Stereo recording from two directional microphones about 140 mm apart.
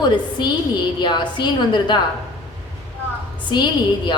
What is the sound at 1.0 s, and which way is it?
A woman's voice, 35° left (ahead or behind).